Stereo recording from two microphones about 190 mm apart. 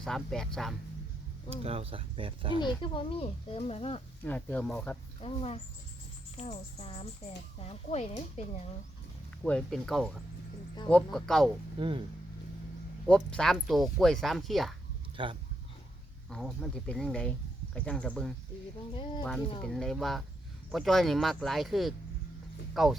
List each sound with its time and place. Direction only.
0.0 s speech: centre (ahead or behind)
1.5 s speech: 30° right (ahead or behind)
2.6 s speech: 25° left (ahead or behind)
4.2 s speech: 10° left (ahead or behind)
5.2 s speech: 30° left (ahead or behind)
9.4 s speech: 5° left (ahead or behind)
11.8 s speech: 25° right (ahead or behind)
13.1 s speech: 5° left (ahead or behind)
15.1 s speech: 25° right (ahead or behind)
16.3 s speech: 5° left (ahead or behind)
19.6 s speech: 5° left (ahead or behind)